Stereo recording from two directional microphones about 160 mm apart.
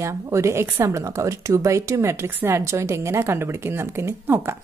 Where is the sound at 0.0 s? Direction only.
20° right (ahead or behind).